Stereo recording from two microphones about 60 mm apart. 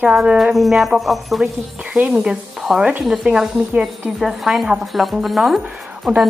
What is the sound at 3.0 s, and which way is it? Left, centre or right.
A woman's voice, centre.